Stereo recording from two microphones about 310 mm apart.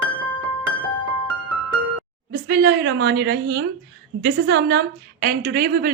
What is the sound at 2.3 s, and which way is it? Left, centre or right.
Speech, right.